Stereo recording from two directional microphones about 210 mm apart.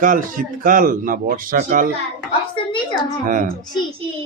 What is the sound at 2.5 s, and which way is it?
Speech, 25° left (ahead or behind).